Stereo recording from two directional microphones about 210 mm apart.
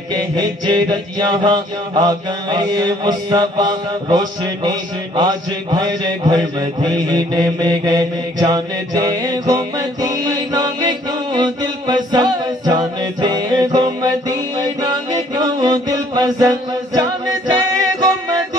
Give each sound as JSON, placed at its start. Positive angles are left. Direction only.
{"t": 0.1, "sound": "music", "side_deg": -20}